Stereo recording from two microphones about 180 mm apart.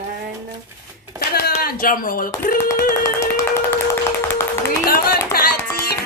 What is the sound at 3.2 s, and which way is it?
Clapping, 15° left (ahead or behind).